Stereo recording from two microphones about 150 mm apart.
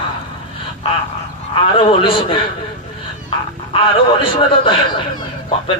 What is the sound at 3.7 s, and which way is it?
Speech, 35° left (ahead or behind).